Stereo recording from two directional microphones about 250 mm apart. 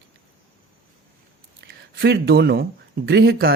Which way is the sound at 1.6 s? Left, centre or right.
Right.